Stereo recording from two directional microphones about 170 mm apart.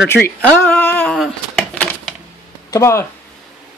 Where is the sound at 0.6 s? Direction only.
10° left (ahead or behind).